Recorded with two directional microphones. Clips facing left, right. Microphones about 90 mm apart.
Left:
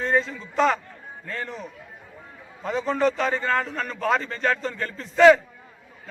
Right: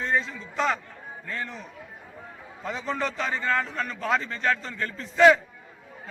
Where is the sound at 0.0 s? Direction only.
40° left (ahead or behind).